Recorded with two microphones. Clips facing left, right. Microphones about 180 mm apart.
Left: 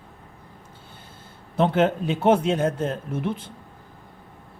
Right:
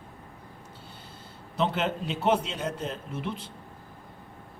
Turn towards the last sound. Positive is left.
turn(degrees=50)  # may be behind; listen again after turning